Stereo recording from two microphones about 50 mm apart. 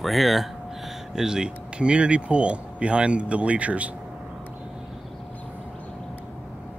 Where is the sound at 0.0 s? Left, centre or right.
Centre; by 3.9 s right.